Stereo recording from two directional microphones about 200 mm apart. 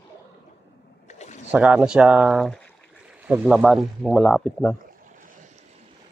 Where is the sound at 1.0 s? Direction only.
35° left (ahead or behind).